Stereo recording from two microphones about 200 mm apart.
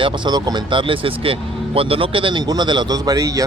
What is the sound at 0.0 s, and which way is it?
Speech, 25° right (ahead or behind).